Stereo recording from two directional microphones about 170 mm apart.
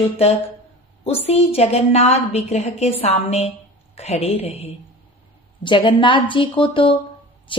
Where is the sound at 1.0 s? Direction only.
35° left (ahead or behind).